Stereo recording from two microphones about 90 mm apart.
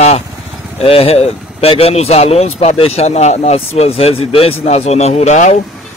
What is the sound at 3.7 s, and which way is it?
Speech, 90° left.